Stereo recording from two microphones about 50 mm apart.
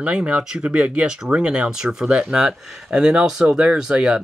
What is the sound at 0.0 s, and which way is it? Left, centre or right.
Speech, right.